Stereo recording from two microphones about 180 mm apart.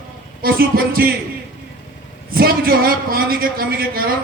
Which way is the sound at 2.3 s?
55° right (ahead or behind).